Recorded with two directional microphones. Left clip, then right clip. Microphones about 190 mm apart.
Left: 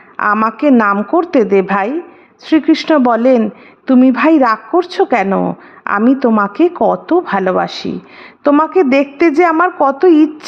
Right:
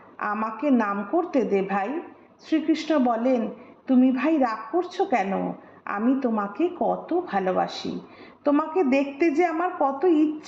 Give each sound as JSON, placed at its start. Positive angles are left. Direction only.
{"t": 0.2, "sound": "a woman's voice", "side_deg": 40}